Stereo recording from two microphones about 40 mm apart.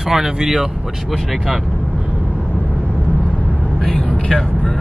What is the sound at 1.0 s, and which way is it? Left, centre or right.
Speech, centre.